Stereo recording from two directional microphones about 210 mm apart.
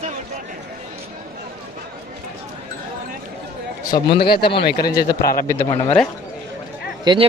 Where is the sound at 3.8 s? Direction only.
15° left (ahead or behind).